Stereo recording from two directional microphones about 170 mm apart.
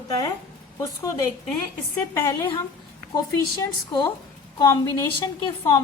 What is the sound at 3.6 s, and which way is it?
A woman's voice, 25° left (ahead or behind).